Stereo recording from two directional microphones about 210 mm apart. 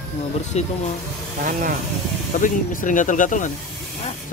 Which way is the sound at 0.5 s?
30° left (ahead or behind).